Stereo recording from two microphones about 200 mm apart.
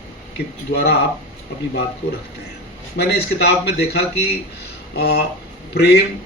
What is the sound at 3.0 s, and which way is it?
Speech, 55° left (ahead or behind).